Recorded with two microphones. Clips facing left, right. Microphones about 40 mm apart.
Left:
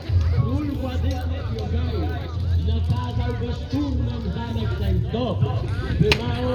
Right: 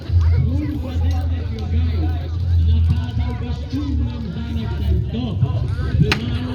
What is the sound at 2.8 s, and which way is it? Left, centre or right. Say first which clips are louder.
Music: right 2 dB; centre.